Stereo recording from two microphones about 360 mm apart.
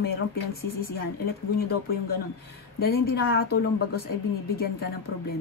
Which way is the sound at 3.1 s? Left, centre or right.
Left.